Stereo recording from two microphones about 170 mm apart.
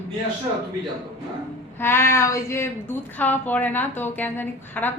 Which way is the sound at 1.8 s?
15° left (ahead or behind).